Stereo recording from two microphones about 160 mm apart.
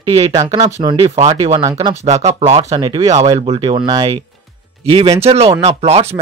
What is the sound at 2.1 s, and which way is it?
Speech, 40° right (ahead or behind).